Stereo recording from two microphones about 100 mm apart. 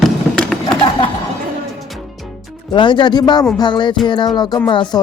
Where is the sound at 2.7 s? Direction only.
55° left (ahead or behind).